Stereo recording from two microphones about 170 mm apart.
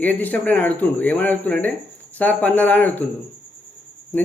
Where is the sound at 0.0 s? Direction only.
10° left (ahead or behind).